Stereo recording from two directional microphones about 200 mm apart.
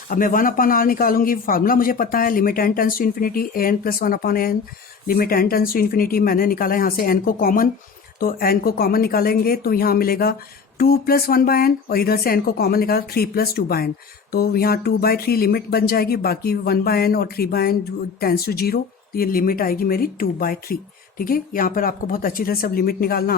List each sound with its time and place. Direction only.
0.1 s speech: 45° left (ahead or behind)